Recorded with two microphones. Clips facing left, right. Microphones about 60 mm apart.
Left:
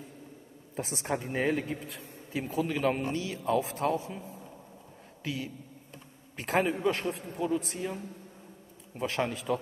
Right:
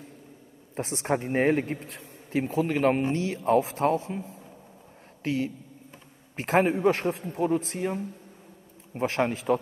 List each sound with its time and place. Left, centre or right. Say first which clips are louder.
0.7 s a man's voice: right 5 dB; right
4.0 s a man's voice: right 5 dB; right
8.9 s a man's voice: right 5 dB; right